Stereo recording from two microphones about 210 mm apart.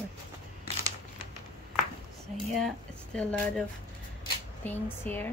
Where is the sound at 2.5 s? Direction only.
5° left (ahead or behind).